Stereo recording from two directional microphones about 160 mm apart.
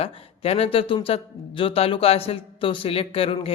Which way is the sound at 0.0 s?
40° left (ahead or behind).